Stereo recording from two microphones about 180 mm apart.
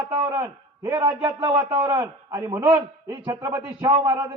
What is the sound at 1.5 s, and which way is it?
A man's voice, 10° right (ahead or behind).